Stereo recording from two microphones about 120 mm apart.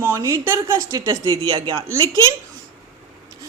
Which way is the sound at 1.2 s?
40° right (ahead or behind).